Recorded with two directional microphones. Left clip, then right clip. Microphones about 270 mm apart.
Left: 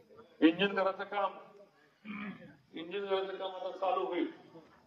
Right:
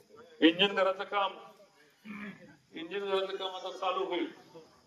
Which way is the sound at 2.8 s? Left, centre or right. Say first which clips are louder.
Right 2 dB; right.